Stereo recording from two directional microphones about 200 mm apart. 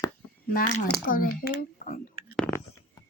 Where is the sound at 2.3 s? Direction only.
5° left (ahead or behind).